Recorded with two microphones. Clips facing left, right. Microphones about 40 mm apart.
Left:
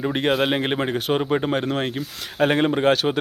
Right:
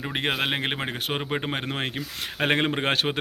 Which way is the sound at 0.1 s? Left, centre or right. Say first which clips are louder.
Left 4 dB; centre.